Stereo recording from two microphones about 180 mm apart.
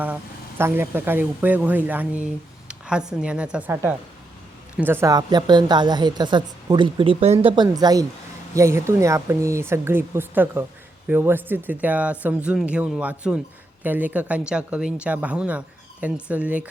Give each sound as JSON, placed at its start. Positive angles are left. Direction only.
{"t": 0.6, "sound": "a woman's voice", "side_deg": -10}